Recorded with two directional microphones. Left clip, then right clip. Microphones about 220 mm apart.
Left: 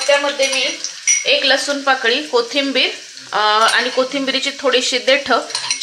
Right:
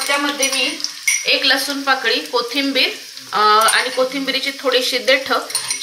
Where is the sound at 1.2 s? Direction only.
60° left (ahead or behind).